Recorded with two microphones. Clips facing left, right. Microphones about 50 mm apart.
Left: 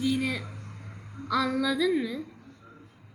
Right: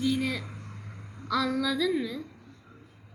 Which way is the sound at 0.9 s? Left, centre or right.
Left.